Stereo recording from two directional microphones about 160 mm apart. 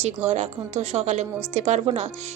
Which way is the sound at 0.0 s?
45° right (ahead or behind).